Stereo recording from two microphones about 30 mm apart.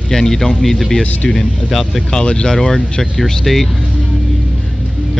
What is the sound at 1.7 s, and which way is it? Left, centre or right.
Speech, centre.